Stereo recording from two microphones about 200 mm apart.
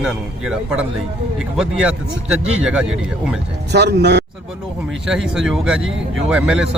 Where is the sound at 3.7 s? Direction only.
55° right (ahead or behind).